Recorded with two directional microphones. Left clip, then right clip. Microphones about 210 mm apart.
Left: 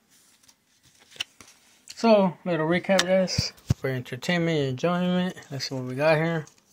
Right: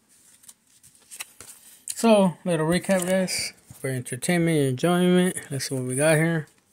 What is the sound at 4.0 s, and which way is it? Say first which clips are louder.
Speech: right 5 dB; 35° right (ahead or behind).